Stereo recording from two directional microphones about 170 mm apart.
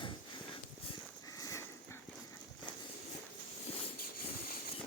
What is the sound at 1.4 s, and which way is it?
Sniff, 20° left (ahead or behind).